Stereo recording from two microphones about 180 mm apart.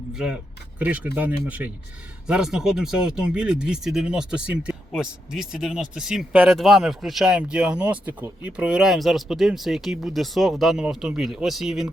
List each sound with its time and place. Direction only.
0.1 s speech: 5° right (ahead or behind)